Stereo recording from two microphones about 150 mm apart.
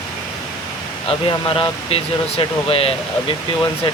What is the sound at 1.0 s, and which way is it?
Speech, 35° left (ahead or behind).